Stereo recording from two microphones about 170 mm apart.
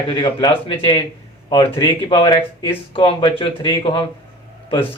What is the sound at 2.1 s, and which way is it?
A man's voice, 25° left (ahead or behind).